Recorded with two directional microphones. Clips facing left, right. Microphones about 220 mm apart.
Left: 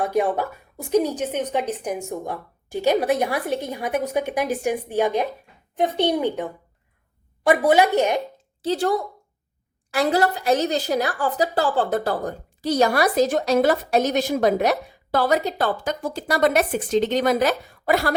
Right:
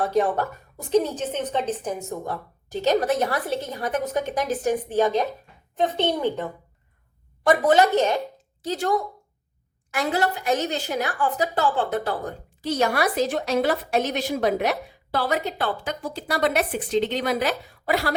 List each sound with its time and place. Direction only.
0.0 s a woman's voice: 10° left (ahead or behind)
8.6 s a woman's voice: 30° left (ahead or behind)